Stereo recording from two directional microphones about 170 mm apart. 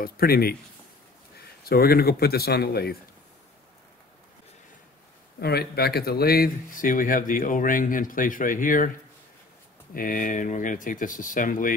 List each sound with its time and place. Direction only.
0.0 s speech: 60° left (ahead or behind)
1.6 s speech: 65° left (ahead or behind)
5.4 s speech: 70° left (ahead or behind); by 8.9 s 50° left (ahead or behind)
9.9 s speech: 55° left (ahead or behind)